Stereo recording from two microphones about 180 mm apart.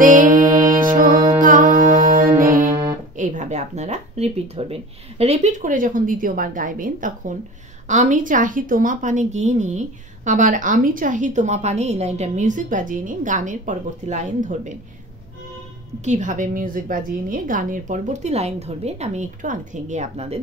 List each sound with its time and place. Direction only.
0.0 s music: 45° right (ahead or behind)
3.2 s a woman's voice: 45° right (ahead or behind)
16.0 s a woman's voice: 40° right (ahead or behind)